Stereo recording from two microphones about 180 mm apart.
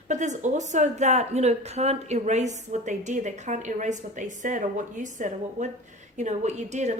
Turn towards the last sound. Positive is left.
turn(degrees=-40)  # may be behind; listen again after turning